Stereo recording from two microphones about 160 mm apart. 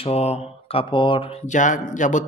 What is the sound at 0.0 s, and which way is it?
A man's voice, 40° left (ahead or behind).